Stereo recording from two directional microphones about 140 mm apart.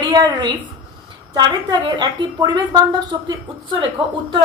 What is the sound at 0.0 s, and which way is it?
A woman's voice, 30° right (ahead or behind).